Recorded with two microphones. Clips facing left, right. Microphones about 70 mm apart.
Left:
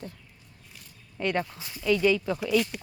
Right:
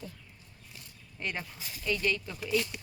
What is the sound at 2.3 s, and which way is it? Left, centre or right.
Speech, left.